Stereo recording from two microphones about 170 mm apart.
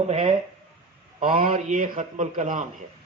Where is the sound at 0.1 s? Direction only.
40° right (ahead or behind).